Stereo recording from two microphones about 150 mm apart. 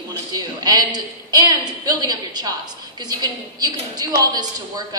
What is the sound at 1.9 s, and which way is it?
A woman's voice, 30° right (ahead or behind).